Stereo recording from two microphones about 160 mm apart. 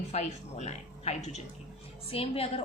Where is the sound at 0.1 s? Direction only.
45° left (ahead or behind).